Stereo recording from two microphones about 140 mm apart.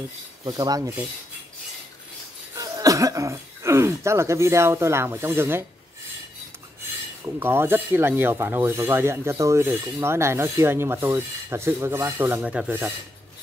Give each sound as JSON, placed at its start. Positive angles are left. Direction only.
{"t": 0.5, "sound": "rub", "side_deg": -25}
{"t": 2.5, "sound": "speech", "side_deg": -25}
{"t": 7.3, "sound": "speech", "side_deg": -15}
{"t": 12.4, "sound": "speech", "side_deg": -5}